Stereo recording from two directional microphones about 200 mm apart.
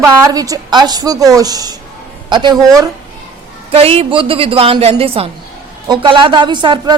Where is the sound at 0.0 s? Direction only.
15° right (ahead or behind).